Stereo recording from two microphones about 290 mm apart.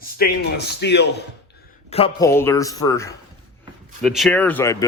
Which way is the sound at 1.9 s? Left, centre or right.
Centre.